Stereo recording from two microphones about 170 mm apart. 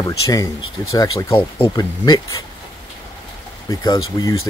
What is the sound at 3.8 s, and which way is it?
Speech, 20° left (ahead or behind).